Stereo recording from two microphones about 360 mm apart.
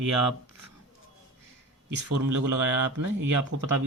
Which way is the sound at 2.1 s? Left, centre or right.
Right.